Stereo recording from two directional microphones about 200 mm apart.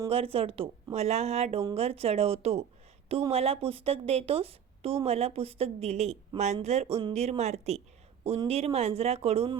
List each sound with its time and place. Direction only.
0.1 s a woman's voice: 30° right (ahead or behind)